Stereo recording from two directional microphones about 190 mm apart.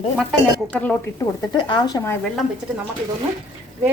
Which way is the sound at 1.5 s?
25° left (ahead or behind).